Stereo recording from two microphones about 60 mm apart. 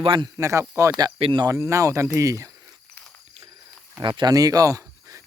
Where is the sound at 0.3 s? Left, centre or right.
Right.